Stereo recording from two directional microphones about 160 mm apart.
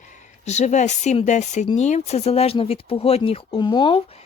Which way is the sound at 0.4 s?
45° left (ahead or behind).